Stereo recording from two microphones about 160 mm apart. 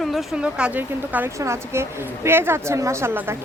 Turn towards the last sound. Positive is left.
turn(degrees=-15)  # may be behind; listen again after turning